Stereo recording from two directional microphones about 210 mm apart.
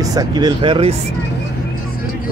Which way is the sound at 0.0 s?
15° right (ahead or behind).